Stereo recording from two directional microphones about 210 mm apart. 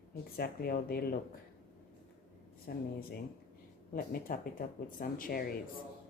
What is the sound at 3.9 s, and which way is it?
Speech, 45° left (ahead or behind).